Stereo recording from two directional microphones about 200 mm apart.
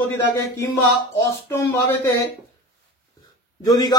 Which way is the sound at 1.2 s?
10° left (ahead or behind).